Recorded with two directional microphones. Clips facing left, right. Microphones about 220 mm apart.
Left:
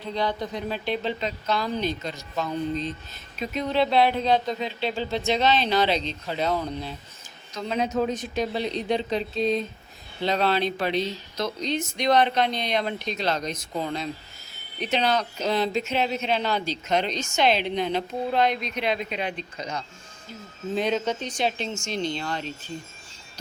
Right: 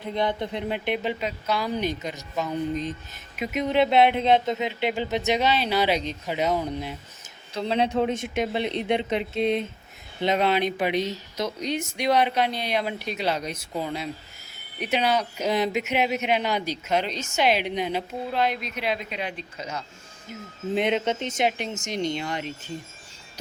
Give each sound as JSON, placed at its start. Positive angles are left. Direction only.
{"t": 0.0, "sound": "speech", "side_deg": -20}
{"t": 7.5, "sound": "speech", "side_deg": -30}
{"t": 20.7, "sound": "speech", "side_deg": -20}